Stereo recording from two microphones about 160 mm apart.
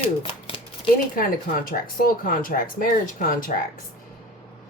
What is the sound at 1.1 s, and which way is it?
Speech, 60° left (ahead or behind).